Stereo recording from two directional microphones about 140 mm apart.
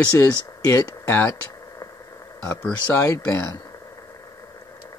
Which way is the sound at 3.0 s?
20° left (ahead or behind).